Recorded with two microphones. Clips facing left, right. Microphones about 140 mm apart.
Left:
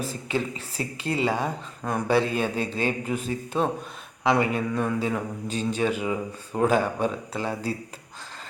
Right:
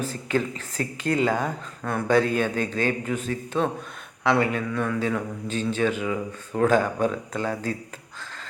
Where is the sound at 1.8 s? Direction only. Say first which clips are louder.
Right 2 dB; 15° left (ahead or behind).